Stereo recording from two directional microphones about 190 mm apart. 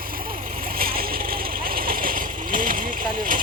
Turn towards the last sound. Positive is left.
turn(degrees=-45)  # may be behind; listen again after turning